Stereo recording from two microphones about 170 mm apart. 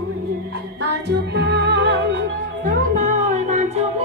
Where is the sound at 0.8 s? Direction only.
80° right.